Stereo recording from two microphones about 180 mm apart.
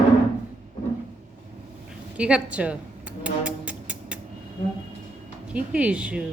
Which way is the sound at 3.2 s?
5° right (ahead or behind).